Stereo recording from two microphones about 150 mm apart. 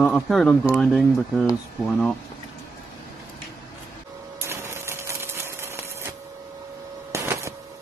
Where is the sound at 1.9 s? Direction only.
5° left (ahead or behind).